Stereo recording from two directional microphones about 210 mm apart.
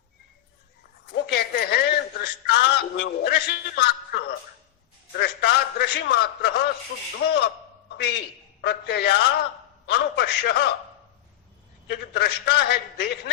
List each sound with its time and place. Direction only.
1.1 s a man's voice: 50° left (ahead or behind)
11.9 s a man's voice: 50° left (ahead or behind)